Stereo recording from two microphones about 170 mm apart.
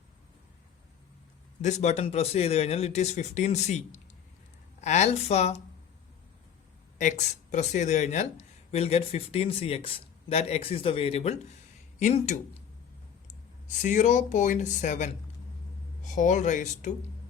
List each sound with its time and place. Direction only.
1.6 s speech: 40° left (ahead or behind)
7.2 s speech: 45° left (ahead or behind)
13.8 s speech: 50° left (ahead or behind)